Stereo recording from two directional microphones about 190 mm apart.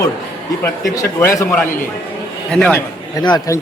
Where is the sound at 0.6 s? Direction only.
15° left (ahead or behind).